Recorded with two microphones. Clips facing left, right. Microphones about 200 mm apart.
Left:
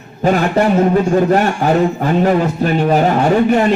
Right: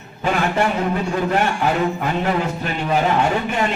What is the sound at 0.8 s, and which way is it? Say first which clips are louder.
Speech: left 9 dB; 45° left (ahead or behind).